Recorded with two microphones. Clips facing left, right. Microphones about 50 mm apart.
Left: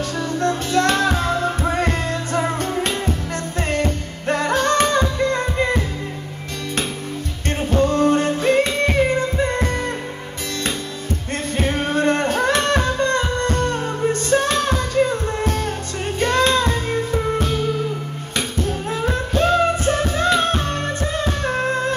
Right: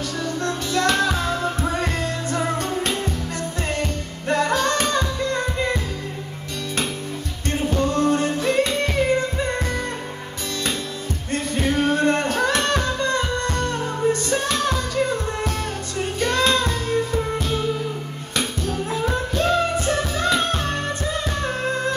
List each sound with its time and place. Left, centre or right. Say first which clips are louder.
0.4 s music: left 4 dB; left
7.7 s music: left 4 dB; left
11.5 s music: even; left
18.6 s music: left 4 dB; left
21.4 s a sound: left 3 dB; left